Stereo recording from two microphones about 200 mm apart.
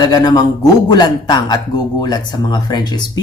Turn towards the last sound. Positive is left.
turn(degrees=20)  # may be behind; listen again after turning